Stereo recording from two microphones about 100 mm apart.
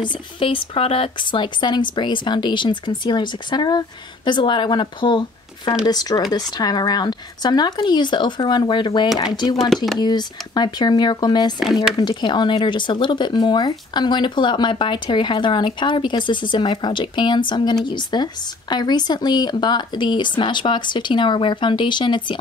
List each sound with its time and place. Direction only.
0.0 s speech: 65° left (ahead or behind); by 11.5 s 45° left (ahead or behind)
11.6 s speech: 5° right (ahead or behind)
12.0 s speech: 50° left (ahead or behind)